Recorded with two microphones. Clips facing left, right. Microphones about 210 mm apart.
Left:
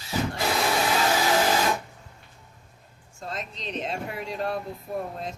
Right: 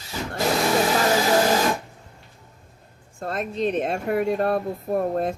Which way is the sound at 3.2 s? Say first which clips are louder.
Right 11 dB; 55° right (ahead or behind).